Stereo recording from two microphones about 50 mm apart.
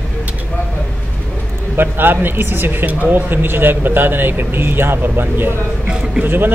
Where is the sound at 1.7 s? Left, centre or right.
Right.